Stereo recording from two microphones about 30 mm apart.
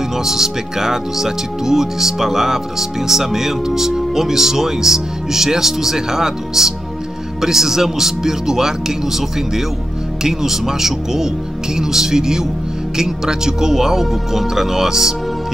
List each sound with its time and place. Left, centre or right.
0.2 s speech: centre
10.2 s speech: centre